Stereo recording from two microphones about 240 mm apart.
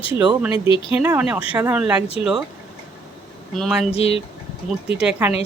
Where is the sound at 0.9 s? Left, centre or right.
Centre.